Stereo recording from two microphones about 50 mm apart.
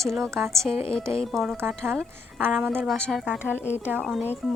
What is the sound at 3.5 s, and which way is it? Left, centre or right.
Speech, left.